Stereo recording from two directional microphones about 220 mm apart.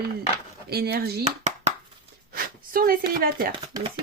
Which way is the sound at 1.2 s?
30° right (ahead or behind).